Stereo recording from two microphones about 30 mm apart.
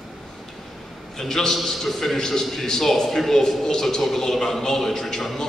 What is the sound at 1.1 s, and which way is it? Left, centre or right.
A man's voice, centre.